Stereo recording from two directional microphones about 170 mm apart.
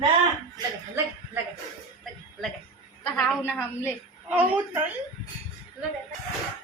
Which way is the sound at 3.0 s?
5° left (ahead or behind).